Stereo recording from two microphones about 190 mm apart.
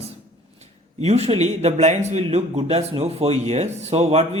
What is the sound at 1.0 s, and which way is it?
A man's voice, 35° right (ahead or behind).